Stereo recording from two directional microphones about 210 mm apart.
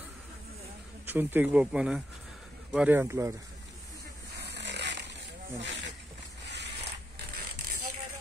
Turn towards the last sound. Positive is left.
turn(degrees=-55)  # may be behind; listen again after turning